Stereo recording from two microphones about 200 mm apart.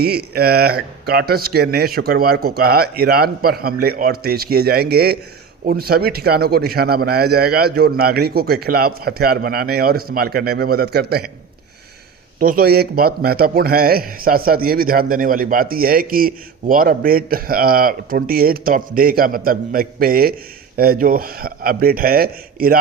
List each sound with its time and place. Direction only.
0.0 s a man's voice: 50° right (ahead or behind)
12.4 s a man's voice: 45° right (ahead or behind)